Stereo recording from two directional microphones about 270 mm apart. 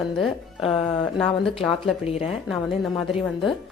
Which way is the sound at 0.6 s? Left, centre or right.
Centre.